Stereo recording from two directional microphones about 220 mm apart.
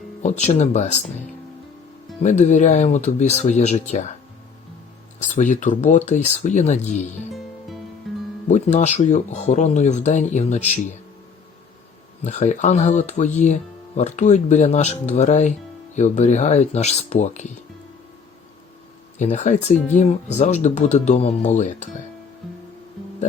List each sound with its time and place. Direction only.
0.2 s speech: 30° left (ahead or behind)
2.2 s speech: 30° left (ahead or behind)
5.2 s speech: 35° left (ahead or behind)
8.4 s speech: 30° left (ahead or behind)
12.2 s speech: 35° left (ahead or behind)
19.2 s speech: 35° left (ahead or behind)